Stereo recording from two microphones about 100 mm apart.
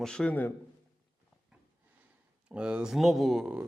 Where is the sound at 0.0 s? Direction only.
10° left (ahead or behind).